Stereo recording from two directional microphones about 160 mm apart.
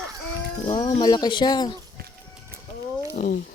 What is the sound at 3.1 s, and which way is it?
Speech, 55° left (ahead or behind).